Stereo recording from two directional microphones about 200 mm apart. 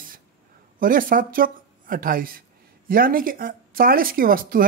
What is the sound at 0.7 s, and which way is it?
Speech, 45° right (ahead or behind).